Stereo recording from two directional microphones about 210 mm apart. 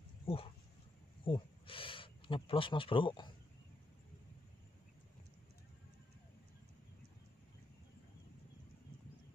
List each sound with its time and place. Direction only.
1.2 s speech: 25° left (ahead or behind)